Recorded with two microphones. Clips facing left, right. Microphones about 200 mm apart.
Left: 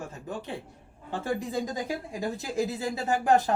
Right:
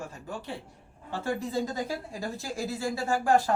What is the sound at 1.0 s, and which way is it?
A woman's voice, 15° left (ahead or behind).